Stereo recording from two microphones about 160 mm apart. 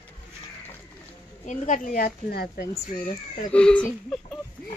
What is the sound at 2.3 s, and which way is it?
Speech, 70° left (ahead or behind).